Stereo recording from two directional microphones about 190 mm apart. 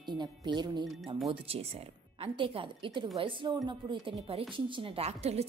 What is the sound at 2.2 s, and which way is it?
A woman's voice, 30° right (ahead or behind).